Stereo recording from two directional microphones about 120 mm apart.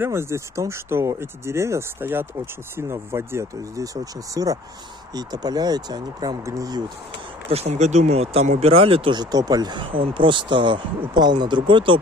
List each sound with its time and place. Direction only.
0.0 s speech: 20° right (ahead or behind)
7.4 s speech: 60° right (ahead or behind)
9.2 s speech: 35° right (ahead or behind)